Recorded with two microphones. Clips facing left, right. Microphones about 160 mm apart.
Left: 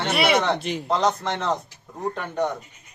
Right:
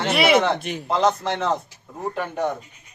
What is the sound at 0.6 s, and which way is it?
Speech, 30° left (ahead or behind).